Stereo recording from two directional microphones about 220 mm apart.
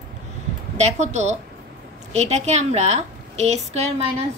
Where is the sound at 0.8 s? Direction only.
30° right (ahead or behind).